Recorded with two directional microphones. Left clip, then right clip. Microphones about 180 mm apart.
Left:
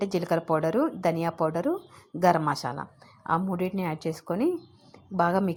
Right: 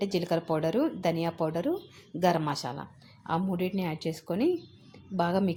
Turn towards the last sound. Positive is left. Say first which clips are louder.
# left 4 dB
turn(degrees=20)  # may be behind; listen again after turning